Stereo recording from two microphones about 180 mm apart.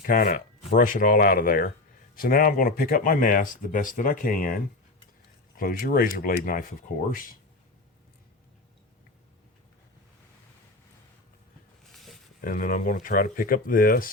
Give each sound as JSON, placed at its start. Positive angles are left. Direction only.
{"t": 0.0, "sound": "speech", "side_deg": 50}
{"t": 11.9, "sound": "a sound", "side_deg": 0}
{"t": 12.4, "sound": "speech", "side_deg": 50}